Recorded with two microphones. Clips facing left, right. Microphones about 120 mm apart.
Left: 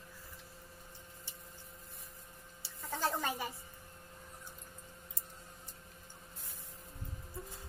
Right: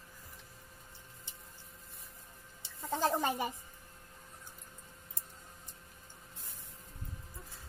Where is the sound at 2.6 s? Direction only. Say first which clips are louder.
Right 4 dB; 20° right (ahead or behind).